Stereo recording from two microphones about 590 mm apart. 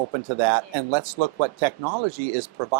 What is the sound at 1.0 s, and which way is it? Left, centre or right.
Speech, right.